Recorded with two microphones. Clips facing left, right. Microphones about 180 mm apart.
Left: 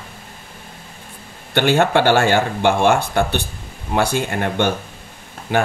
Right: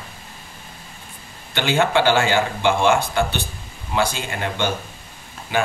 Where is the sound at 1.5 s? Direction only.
55° left (ahead or behind).